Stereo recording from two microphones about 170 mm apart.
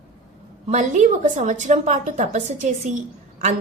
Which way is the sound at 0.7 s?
45° right (ahead or behind).